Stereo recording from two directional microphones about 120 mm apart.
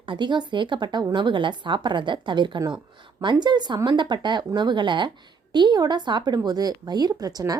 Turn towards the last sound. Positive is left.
turn(degrees=-30)  # may be behind; listen again after turning